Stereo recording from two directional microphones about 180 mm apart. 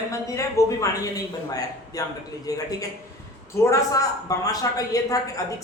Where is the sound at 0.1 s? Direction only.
15° left (ahead or behind).